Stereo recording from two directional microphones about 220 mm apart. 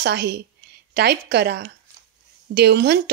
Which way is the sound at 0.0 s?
50° right (ahead or behind).